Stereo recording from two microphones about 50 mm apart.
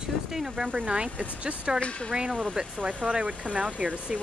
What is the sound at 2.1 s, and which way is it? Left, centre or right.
Speech, centre.